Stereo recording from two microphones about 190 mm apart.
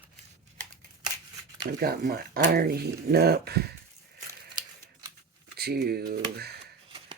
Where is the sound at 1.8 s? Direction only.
55° right (ahead or behind).